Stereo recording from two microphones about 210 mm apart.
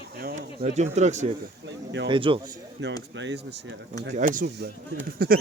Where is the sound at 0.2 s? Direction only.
45° right (ahead or behind).